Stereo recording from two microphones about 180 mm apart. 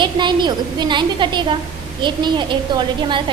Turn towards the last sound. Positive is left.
turn(degrees=-25)  # may be behind; listen again after turning